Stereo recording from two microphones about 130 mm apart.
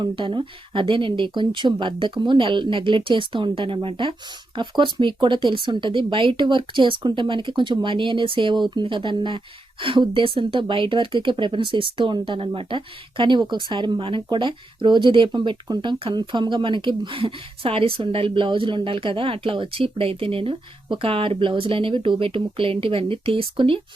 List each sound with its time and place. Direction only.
0.0 s speech: 40° right (ahead or behind)